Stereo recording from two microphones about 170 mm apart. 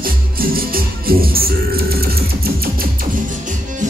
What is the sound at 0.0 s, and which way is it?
Music, 60° right (ahead or behind).